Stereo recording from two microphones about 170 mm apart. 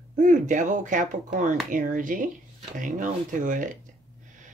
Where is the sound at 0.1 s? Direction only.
45° right (ahead or behind).